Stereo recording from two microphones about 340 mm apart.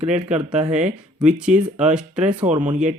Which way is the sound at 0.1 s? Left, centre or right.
Centre.